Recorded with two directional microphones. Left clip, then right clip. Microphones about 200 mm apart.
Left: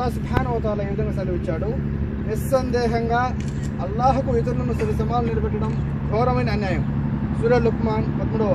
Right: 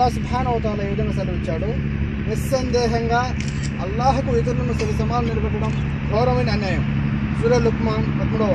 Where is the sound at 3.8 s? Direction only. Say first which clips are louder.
Even; 10° left (ahead or behind).